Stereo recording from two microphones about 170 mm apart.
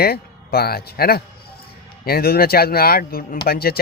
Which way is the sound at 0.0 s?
65° left (ahead or behind).